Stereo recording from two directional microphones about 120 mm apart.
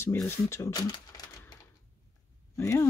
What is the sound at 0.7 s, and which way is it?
Speech, 35° left (ahead or behind).